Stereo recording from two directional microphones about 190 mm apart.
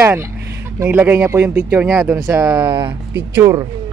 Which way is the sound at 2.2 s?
20° right (ahead or behind).